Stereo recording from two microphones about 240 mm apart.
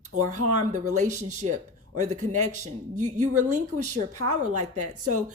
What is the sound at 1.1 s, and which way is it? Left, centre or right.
A woman's voice, right.